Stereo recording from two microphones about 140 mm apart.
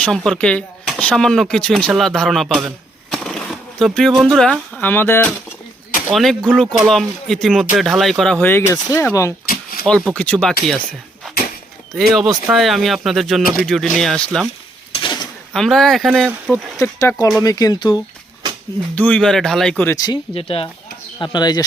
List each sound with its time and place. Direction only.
0.0 s speech: 5° left (ahead or behind)
6.1 s speech: centre (ahead or behind); by 9.3 s 20° left (ahead or behind)
9.5 s a sound: 90° left
9.8 s speech: centre (ahead or behind)
11.9 s speech: centre (ahead or behind)
14.9 s a sound: 35° left (ahead or behind)
15.5 s speech: centre (ahead or behind)
16.8 s speech: 20° left (ahead or behind)
18.9 s speech: 10° left (ahead or behind)
19.9 s speech: 25° left (ahead or behind)
20.3 s speech: 40° left (ahead or behind)
21.2 s speech: 30° left (ahead or behind)